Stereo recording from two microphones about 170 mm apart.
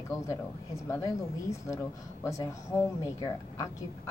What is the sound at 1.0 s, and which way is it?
A woman's voice, 20° left (ahead or behind).